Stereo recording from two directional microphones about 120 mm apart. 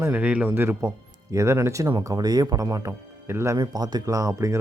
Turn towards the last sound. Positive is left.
turn(degrees=-30)  # may be behind; listen again after turning